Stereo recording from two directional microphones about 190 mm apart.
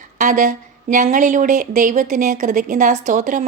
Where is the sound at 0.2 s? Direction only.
40° right (ahead or behind).